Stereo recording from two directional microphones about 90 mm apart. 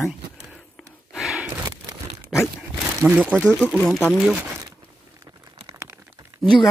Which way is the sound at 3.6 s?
5° left (ahead or behind).